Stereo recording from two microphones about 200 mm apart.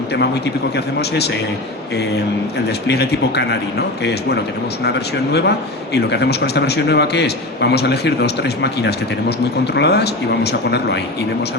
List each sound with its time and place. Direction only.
2.8 s a man's voice: 55° left (ahead or behind)